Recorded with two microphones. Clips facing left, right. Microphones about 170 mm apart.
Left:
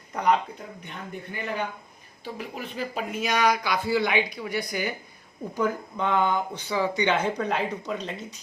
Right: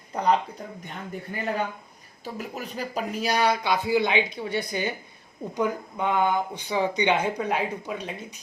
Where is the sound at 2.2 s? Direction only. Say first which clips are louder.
Right 1 dB; 45° right (ahead or behind); by 8.4 s 10° right (ahead or behind).